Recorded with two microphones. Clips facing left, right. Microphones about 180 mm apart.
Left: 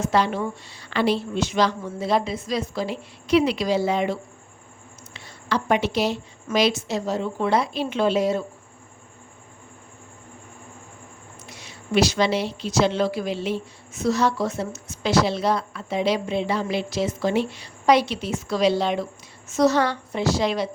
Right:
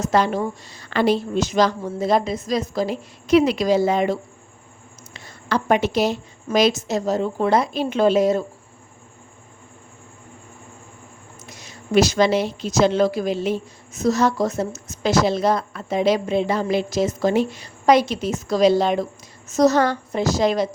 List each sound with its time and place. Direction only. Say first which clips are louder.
0.0 s a woman's voice: right 2 dB; 45° right (ahead or behind)
11.4 s a woman's voice: right 3 dB; 45° right (ahead or behind)